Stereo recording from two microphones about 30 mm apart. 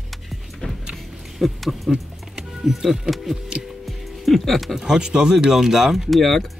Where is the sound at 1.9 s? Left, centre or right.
Centre.